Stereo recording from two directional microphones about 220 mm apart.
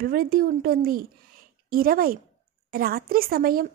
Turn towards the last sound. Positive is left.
turn(degrees=-40)  # may be behind; listen again after turning